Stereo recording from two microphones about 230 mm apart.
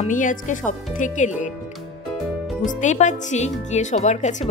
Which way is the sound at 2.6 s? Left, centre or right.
Left.